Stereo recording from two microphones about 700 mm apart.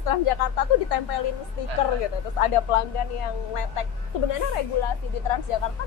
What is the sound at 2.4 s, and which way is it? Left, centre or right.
A woman's voice, left.